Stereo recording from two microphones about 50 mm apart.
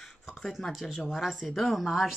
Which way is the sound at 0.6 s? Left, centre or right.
Centre.